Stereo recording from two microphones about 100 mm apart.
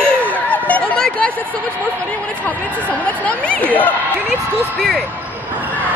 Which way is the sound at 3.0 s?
15° left (ahead or behind).